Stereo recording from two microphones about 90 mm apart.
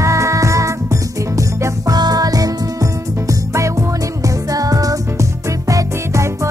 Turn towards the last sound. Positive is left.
turn(degrees=-35)  # may be behind; listen again after turning